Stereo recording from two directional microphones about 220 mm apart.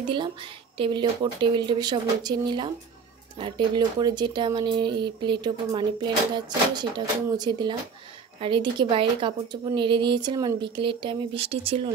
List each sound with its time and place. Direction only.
0.1 s speech: 20° right (ahead or behind)